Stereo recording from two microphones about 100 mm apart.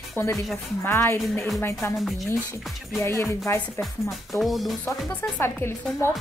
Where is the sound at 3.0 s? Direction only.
25° left (ahead or behind).